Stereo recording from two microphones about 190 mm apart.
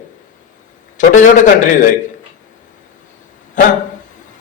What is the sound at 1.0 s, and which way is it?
Speech, 40° left (ahead or behind).